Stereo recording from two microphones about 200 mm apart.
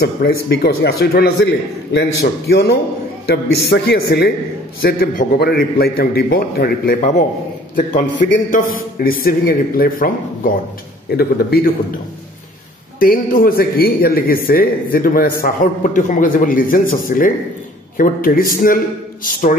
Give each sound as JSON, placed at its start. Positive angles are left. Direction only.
{"t": 0.0, "sound": "a man's voice", "side_deg": 55}
{"t": 8.5, "sound": "a man's voice", "side_deg": 45}
{"t": 13.0, "sound": "a man's voice", "side_deg": 45}